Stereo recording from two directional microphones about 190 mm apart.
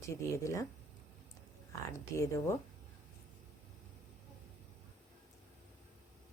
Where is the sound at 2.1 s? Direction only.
15° left (ahead or behind).